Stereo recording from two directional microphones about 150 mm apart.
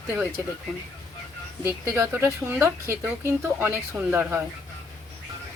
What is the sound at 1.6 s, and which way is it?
Speech, 15° right (ahead or behind).